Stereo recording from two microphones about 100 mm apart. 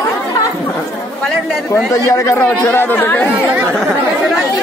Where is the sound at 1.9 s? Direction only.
30° left (ahead or behind).